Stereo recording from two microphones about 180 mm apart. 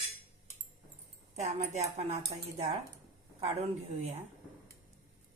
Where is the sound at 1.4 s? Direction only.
40° right (ahead or behind).